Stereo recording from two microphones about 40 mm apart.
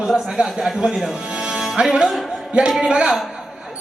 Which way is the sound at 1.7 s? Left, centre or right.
Right.